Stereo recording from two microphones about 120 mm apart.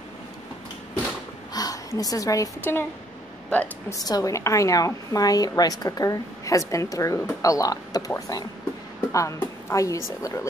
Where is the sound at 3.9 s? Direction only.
30° left (ahead or behind).